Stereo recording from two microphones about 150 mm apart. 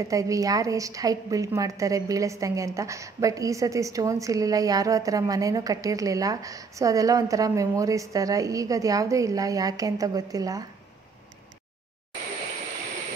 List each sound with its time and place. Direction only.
0.0 s a woman's voice: 20° right (ahead or behind)